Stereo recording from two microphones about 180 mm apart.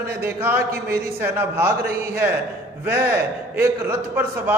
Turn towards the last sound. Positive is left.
turn(degrees=-10)  # may be behind; listen again after turning